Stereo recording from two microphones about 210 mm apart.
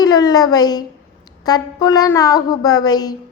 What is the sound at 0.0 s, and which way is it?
A woman's voice, 20° left (ahead or behind).